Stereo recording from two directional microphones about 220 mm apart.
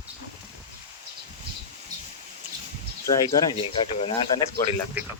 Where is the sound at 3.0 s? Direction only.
20° left (ahead or behind).